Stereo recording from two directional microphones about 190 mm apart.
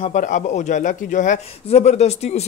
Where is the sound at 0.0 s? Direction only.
40° left (ahead or behind).